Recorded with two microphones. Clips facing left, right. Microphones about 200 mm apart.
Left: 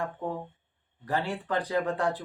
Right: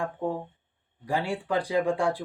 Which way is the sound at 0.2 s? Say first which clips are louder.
Right 4 dB; 10° right (ahead or behind).